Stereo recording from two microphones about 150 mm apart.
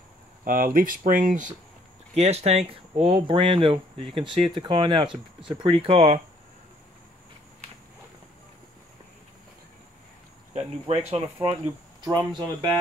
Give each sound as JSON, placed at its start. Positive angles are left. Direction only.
{"t": 0.5, "sound": "speech", "side_deg": -70}
{"t": 2.1, "sound": "speech", "side_deg": -45}
{"t": 10.5, "sound": "cricket", "side_deg": -45}
{"t": 12.0, "sound": "speech", "side_deg": -30}